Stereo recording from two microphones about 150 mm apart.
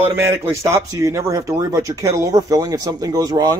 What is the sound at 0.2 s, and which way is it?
Speech, 20° right (ahead or behind).